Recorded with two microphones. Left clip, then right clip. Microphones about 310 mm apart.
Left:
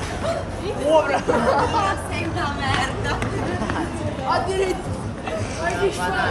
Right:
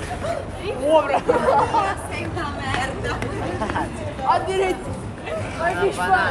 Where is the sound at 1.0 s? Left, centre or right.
Right.